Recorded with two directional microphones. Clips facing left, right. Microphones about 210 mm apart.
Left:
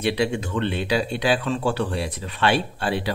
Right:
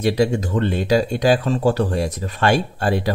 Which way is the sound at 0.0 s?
40° right (ahead or behind).